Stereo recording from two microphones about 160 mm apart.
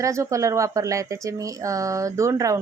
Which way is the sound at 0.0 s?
20° right (ahead or behind).